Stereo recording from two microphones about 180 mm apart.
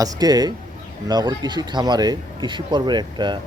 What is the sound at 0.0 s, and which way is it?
Speech, 20° right (ahead or behind).